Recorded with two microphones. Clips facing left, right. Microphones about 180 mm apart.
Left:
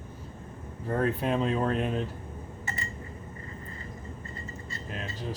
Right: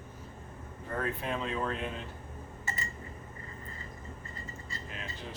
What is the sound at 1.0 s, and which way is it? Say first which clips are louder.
Speech: left 7 dB; 35° left (ahead or behind).